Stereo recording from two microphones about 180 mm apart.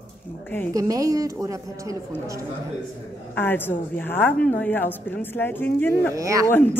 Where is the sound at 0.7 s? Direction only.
20° right (ahead or behind).